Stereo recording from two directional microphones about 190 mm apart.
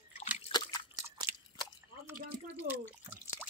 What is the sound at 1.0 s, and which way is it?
Biting, 20° right (ahead or behind).